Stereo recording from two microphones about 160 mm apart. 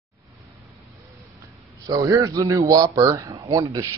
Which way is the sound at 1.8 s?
25° right (ahead or behind).